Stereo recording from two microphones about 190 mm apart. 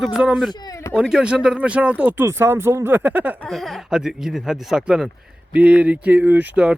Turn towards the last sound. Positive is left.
turn(degrees=-5)  # may be behind; listen again after turning